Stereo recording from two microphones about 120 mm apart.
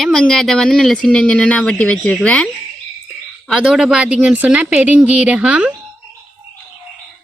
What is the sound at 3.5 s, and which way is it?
Speech, 5° right (ahead or behind).